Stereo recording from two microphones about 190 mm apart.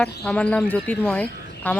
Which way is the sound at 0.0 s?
5° left (ahead or behind).